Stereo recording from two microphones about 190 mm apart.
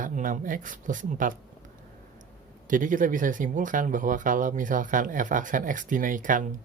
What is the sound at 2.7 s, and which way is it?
Speech, 45° right (ahead or behind).